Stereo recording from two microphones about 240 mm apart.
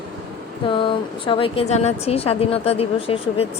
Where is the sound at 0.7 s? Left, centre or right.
Left.